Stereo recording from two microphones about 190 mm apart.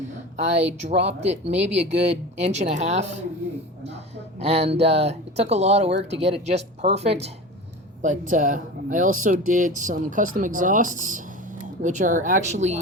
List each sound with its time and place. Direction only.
0.3 s speech: 35° right (ahead or behind)
4.4 s speech: 30° right (ahead or behind)
8.3 s speech: 45° right (ahead or behind)